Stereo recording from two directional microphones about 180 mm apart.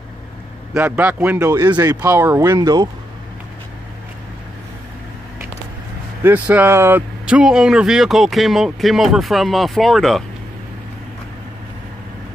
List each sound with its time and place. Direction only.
0.7 s speech: 10° right (ahead or behind)
6.2 s speech: 10° right (ahead or behind)